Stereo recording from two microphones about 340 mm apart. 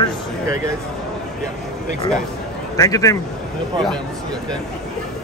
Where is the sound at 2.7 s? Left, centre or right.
Centre.